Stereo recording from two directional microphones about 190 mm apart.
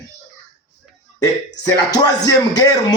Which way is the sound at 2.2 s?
20° left (ahead or behind).